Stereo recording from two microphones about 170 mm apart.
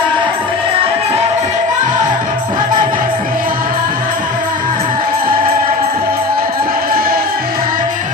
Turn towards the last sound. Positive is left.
turn(degrees=-60)  # may be behind; listen again after turning